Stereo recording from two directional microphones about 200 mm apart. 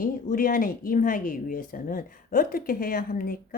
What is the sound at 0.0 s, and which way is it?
Speech, 45° left (ahead or behind).